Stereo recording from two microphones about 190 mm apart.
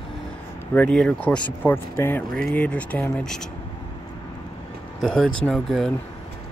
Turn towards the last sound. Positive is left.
turn(degrees=0)  # may be behind; listen again after turning